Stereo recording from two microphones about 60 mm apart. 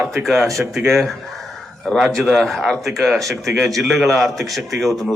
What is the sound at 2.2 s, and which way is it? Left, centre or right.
A man's voice, centre.